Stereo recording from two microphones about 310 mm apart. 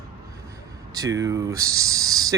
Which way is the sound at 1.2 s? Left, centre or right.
Centre.